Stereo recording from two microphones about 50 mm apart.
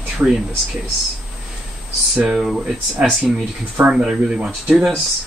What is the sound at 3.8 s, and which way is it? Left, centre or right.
Speech, centre.